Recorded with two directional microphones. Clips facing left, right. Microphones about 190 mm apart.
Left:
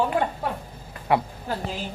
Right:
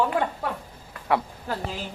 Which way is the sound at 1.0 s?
20° left (ahead or behind).